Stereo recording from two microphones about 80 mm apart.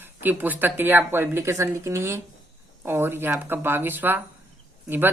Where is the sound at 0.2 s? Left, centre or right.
Right.